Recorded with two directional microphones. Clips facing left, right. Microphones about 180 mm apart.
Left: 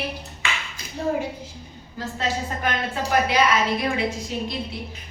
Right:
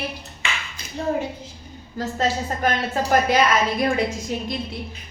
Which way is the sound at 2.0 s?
40° right (ahead or behind).